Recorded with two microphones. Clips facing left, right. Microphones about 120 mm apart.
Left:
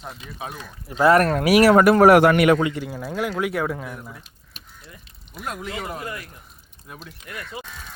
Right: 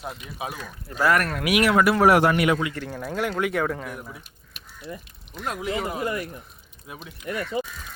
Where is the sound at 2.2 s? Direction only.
65° left (ahead or behind).